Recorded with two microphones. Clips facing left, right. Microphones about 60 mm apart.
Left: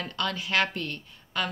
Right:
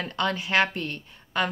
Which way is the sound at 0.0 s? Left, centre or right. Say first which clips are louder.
Right 4 dB; right.